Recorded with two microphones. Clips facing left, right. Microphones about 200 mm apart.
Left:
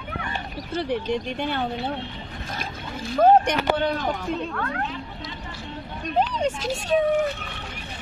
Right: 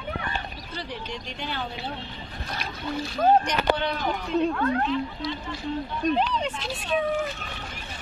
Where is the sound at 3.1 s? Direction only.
55° left (ahead or behind).